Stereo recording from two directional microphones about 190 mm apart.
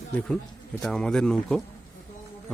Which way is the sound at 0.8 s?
5° left (ahead or behind).